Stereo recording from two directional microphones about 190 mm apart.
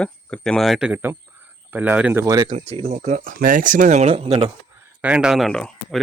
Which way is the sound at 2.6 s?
30° right (ahead or behind).